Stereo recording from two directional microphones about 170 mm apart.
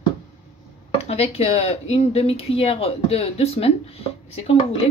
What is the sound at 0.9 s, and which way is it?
Speech, 35° left (ahead or behind).